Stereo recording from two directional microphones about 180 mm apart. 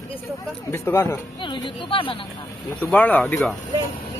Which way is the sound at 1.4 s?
25° left (ahead or behind).